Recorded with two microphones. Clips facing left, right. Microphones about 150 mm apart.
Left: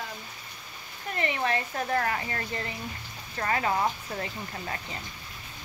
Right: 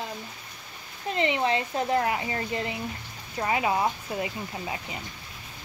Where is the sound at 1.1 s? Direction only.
20° right (ahead or behind).